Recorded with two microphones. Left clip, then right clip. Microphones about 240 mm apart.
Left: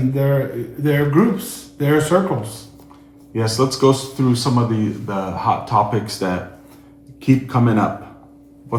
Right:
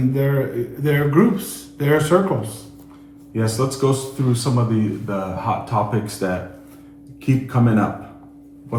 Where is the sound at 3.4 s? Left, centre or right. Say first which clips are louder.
Left 3 dB; left.